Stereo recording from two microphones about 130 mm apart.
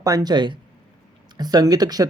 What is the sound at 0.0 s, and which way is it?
Speech, 30° right (ahead or behind).